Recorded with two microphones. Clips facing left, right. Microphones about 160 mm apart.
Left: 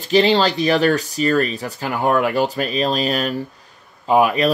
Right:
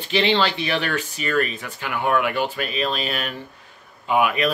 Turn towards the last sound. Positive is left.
turn(degrees=35)  # may be behind; listen again after turning